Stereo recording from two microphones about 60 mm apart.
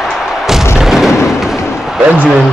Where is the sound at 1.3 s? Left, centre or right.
Centre.